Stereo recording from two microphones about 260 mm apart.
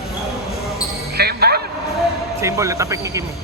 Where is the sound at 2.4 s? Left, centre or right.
Centre.